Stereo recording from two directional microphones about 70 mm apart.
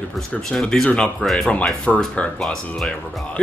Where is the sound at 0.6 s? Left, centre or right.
Centre.